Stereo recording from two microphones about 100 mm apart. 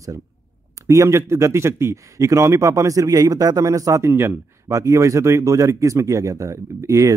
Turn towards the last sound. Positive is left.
turn(degrees=-30)  # may be behind; listen again after turning